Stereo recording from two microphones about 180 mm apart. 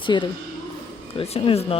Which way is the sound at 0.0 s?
25° left (ahead or behind).